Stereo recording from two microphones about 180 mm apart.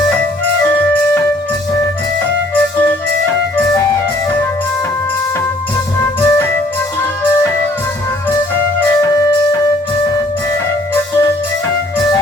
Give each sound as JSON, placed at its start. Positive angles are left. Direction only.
{"t": 6.0, "sound": "music", "side_deg": 10}
{"t": 9.0, "sound": "music", "side_deg": 20}